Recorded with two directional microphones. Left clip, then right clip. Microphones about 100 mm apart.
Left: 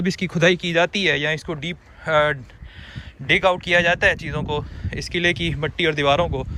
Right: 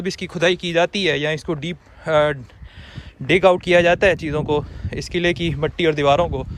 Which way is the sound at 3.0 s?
90° right.